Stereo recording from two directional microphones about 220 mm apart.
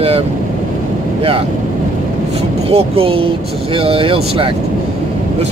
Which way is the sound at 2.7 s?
25° right (ahead or behind).